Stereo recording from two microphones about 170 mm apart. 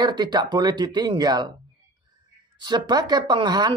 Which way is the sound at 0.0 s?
25° right (ahead or behind).